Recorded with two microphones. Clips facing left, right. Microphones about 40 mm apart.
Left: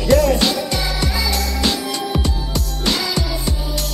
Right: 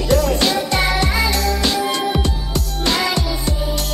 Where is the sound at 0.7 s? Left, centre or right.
Right.